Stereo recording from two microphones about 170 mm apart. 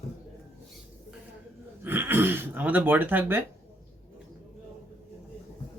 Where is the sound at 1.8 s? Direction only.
10° right (ahead or behind).